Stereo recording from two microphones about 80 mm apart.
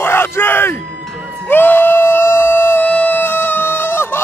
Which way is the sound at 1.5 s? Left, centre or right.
Left.